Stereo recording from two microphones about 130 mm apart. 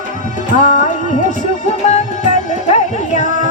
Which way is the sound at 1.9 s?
65° left (ahead or behind).